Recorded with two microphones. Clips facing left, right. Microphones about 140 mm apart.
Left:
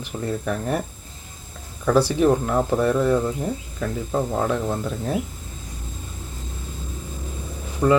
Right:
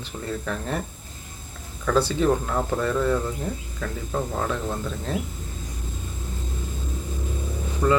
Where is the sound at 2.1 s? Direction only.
15° left (ahead or behind).